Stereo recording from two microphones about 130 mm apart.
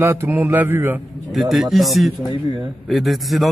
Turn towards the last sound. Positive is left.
turn(degrees=0)  # may be behind; listen again after turning